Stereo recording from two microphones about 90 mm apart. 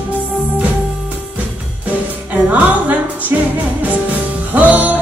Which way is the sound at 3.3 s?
20° right (ahead or behind).